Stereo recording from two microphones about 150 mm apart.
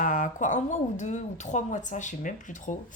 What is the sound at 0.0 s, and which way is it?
A woman's voice, 60° left (ahead or behind).